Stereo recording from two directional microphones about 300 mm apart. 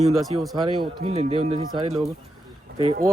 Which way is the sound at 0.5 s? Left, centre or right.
Centre.